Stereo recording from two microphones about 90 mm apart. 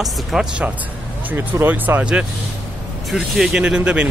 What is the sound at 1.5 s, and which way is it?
Speech, 20° right (ahead or behind).